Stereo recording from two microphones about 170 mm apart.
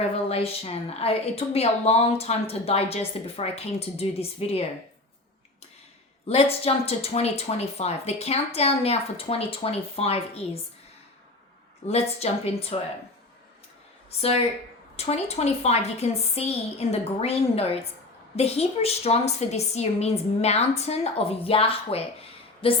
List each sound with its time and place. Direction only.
0.0 s a woman's voice: 35° left (ahead or behind)
6.2 s a woman's voice: 35° left (ahead or behind)
11.9 s a woman's voice: 40° left (ahead or behind)
14.2 s a woman's voice: 35° left (ahead or behind)